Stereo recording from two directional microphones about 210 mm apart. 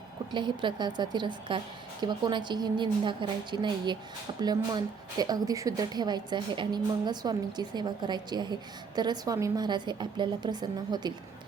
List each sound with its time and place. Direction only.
0.3 s a woman's voice: 20° right (ahead or behind)